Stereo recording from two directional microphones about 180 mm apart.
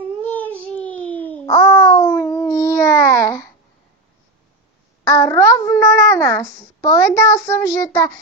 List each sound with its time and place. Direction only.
0.2 s a sound: 10° left (ahead or behind)
1.5 s babbling: 15° left (ahead or behind)
5.0 s a child's voice: 15° left (ahead or behind)